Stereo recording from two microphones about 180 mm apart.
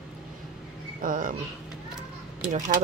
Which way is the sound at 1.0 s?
50° right (ahead or behind).